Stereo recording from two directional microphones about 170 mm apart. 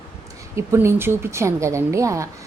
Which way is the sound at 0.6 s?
15° right (ahead or behind).